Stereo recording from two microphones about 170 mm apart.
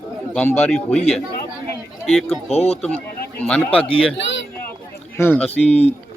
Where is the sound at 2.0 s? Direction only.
Centre (ahead or behind).